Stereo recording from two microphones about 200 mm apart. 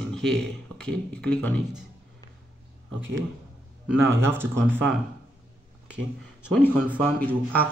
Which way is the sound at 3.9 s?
10° right (ahead or behind).